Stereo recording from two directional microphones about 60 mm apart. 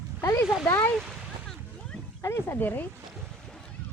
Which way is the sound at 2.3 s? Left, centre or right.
Left.